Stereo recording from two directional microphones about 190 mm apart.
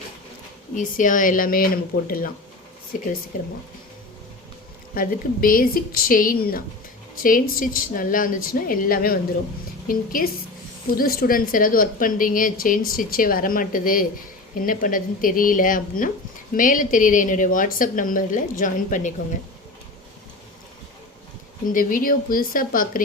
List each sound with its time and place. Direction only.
0.8 s a woman's voice: 45° left (ahead or behind)
4.9 s a woman's voice: 50° left (ahead or behind)
21.7 s a woman's voice: 45° left (ahead or behind)